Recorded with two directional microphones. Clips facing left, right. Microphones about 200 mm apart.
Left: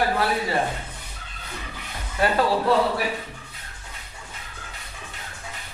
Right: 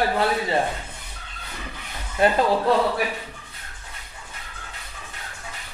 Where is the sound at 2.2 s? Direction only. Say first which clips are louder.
Right 3 dB; 20° right (ahead or behind).